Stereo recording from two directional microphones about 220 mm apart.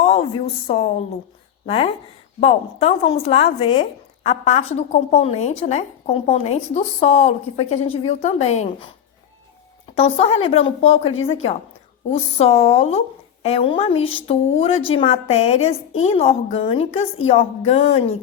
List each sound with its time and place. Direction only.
0.0 s a sound: 30° left (ahead or behind)
0.7 s a woman's voice: 30° left (ahead or behind)
9.9 s a woman's voice: 25° left (ahead or behind)